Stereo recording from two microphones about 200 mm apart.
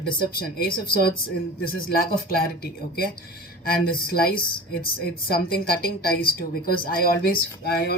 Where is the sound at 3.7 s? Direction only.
50° left (ahead or behind).